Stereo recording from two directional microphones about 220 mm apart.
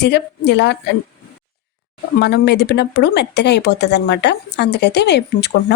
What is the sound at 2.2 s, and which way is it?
Speech, 50° left (ahead or behind).